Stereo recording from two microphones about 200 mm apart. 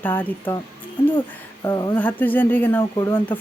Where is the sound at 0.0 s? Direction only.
10° left (ahead or behind).